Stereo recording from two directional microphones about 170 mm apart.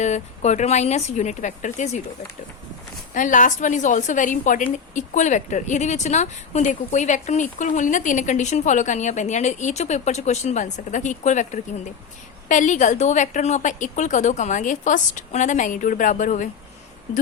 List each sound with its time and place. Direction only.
0.0 s a woman's voice: 40° left (ahead or behind)
3.2 s a woman's voice: 50° left (ahead or behind)